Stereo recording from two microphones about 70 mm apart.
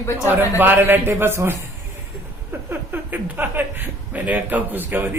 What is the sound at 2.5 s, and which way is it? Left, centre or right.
Speech, right.